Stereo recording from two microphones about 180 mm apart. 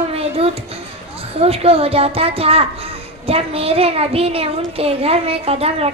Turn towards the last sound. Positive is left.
turn(degrees=-35)  # may be behind; listen again after turning